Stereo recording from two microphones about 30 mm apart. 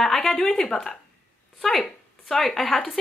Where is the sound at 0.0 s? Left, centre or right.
Centre.